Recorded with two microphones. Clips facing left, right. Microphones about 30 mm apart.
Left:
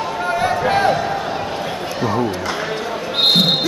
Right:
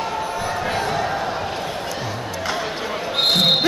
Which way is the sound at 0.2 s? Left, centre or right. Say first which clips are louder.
Left 6 dB; left.